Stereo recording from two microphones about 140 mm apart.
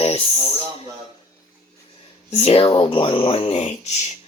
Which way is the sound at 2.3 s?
45° left (ahead or behind).